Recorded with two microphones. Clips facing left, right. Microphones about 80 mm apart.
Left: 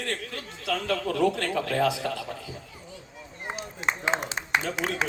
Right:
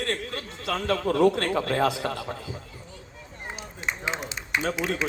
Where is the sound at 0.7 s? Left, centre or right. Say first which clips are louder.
Right 2 dB; right.